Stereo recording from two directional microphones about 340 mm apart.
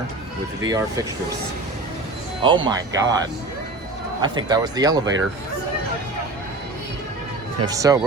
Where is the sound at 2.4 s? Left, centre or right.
Centre.